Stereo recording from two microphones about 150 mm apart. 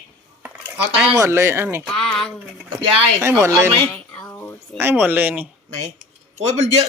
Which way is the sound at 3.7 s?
10° left (ahead or behind).